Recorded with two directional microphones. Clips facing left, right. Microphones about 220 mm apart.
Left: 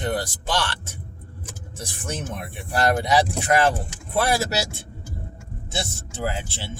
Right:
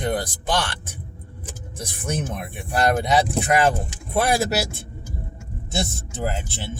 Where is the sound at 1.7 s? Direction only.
15° right (ahead or behind).